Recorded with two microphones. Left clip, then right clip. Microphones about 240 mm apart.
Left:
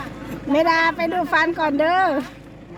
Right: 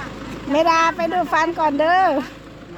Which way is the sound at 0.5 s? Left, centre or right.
Centre.